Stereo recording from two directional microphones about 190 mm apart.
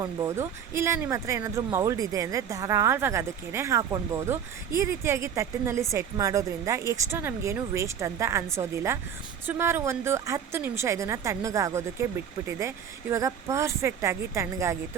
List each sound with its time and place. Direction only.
0.0 s speech: 15° right (ahead or behind)